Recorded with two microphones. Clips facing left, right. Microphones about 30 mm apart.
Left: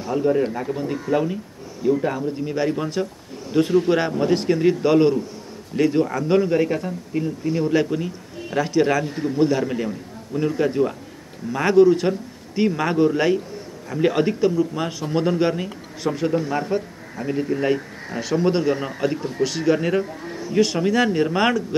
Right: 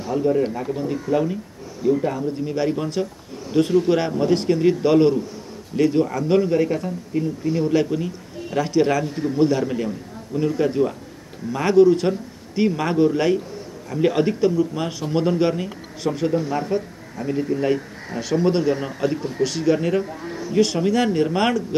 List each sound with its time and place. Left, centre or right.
0.0 s a man's voice: centre
2.5 s a man's voice: centre